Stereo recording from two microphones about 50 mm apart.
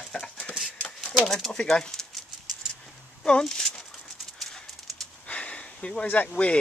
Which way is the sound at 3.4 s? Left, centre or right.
Centre.